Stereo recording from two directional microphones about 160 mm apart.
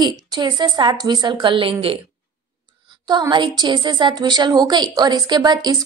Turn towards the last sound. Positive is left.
turn(degrees=-25)  # may be behind; listen again after turning